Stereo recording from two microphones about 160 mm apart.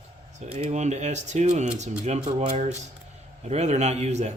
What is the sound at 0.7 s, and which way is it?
A man's voice, 45° right (ahead or behind).